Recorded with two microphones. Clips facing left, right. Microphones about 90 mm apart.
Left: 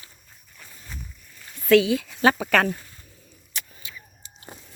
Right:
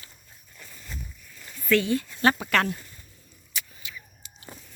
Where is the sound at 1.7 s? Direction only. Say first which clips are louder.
Left 5 dB; 90° left.